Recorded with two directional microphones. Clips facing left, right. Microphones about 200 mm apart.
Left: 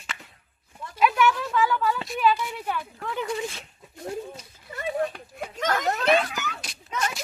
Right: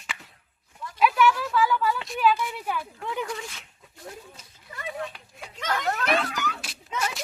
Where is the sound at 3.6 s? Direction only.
35° left (ahead or behind).